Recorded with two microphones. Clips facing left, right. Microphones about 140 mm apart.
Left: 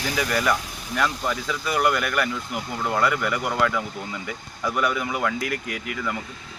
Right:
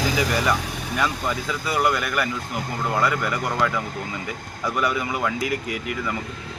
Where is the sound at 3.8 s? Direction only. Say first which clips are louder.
Right 2 dB; 50° right (ahead or behind).